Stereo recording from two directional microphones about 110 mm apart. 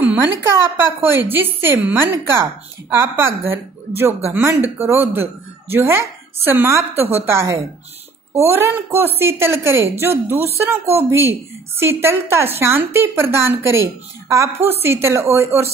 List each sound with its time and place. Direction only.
0.0 s a woman's voice: 15° right (ahead or behind)